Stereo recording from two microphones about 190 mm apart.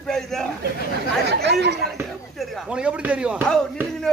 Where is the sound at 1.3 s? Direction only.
60° right (ahead or behind).